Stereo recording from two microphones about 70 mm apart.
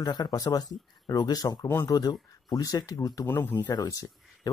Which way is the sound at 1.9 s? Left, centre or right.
Left.